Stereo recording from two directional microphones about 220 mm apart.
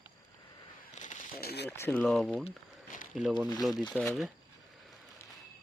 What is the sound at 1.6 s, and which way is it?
Speech, 10° left (ahead or behind).